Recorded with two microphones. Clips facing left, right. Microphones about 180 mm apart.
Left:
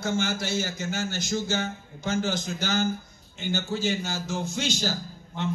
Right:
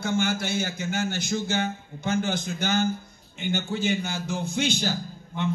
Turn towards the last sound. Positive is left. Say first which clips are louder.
# right 2 dB
turn(degrees=-55)  # may be behind; listen again after turning